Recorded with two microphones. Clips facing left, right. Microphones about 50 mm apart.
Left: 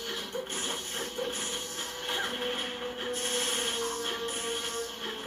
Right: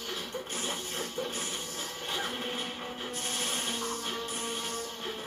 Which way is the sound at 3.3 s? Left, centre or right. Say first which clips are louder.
Even; left.